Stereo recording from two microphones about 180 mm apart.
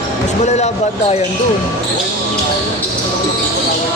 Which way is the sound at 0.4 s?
40° left (ahead or behind).